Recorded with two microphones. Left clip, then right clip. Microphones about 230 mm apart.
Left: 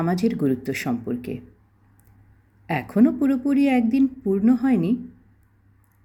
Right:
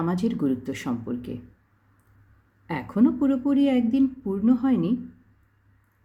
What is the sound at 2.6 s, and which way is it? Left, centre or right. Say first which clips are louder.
A woman's voice: left 3 dB; left.